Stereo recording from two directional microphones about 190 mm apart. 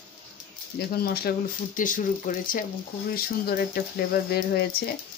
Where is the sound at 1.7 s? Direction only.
45° left (ahead or behind).